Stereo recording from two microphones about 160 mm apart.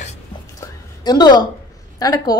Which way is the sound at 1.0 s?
25° left (ahead or behind).